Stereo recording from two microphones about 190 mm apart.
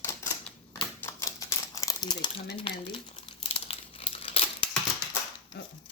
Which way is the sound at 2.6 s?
25° left (ahead or behind).